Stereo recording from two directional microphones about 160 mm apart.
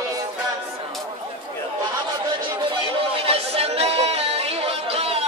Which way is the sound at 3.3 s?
40° right (ahead or behind).